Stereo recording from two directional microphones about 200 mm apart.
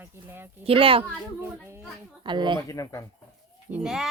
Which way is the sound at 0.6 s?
25° right (ahead or behind).